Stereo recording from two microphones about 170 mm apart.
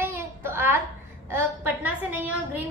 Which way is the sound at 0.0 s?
15° right (ahead or behind).